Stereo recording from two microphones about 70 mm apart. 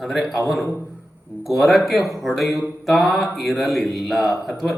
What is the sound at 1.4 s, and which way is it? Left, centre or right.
A man's voice, centre.